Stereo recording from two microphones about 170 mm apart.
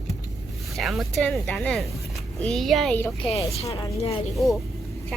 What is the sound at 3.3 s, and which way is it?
Speech, 35° left (ahead or behind).